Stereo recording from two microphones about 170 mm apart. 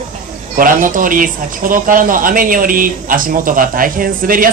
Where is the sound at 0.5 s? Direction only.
50° right (ahead or behind).